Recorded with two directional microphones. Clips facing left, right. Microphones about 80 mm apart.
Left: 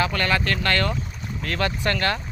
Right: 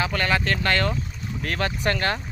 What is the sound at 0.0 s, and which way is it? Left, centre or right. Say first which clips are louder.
Speech: left 1 dB; centre.